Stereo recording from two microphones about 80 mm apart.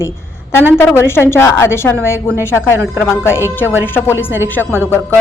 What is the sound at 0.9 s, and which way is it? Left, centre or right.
A woman's voice, left.